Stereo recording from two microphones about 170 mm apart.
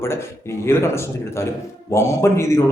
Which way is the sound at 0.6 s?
15° left (ahead or behind).